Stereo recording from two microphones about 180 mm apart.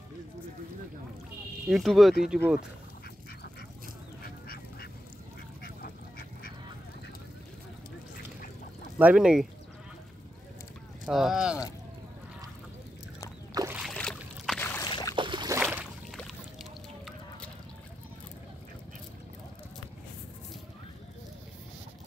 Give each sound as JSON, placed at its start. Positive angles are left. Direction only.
{"t": 1.7, "sound": "speech", "side_deg": 0}
{"t": 5.6, "sound": "duck", "side_deg": 55}
{"t": 8.9, "sound": "speech", "side_deg": -5}
{"t": 11.1, "sound": "speech", "side_deg": 0}
{"t": 13.7, "sound": "boat", "side_deg": 0}
{"t": 14.6, "sound": "a sound", "side_deg": 10}
{"t": 14.9, "sound": "boat", "side_deg": 25}
{"t": 15.1, "sound": "boat", "side_deg": -25}
{"t": 15.6, "sound": "boat", "side_deg": -5}